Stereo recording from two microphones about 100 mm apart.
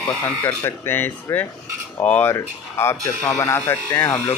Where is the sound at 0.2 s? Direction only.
20° left (ahead or behind).